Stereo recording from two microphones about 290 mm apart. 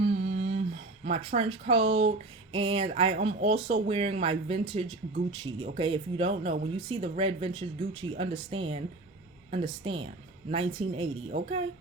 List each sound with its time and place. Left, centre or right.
0.0 s speech: right